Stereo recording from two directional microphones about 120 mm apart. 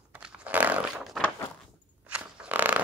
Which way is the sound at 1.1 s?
Centre (ahead or behind).